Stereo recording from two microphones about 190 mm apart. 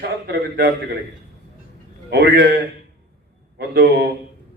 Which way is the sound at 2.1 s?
55° right (ahead or behind).